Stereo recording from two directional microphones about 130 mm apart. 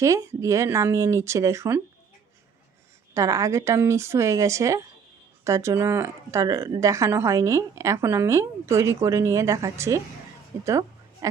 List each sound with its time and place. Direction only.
0.0 s speech: 25° right (ahead or behind)
3.2 s a woman's voice: 25° right (ahead or behind)